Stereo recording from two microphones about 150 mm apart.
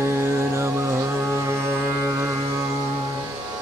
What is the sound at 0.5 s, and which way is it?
Mantra, 15° right (ahead or behind).